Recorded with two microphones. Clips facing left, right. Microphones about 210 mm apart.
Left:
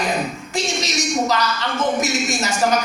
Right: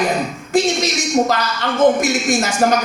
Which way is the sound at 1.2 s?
50° right (ahead or behind).